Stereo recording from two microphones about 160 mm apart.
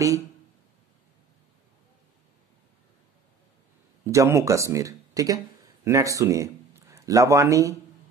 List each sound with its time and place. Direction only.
4.0 s speech: 20° right (ahead or behind)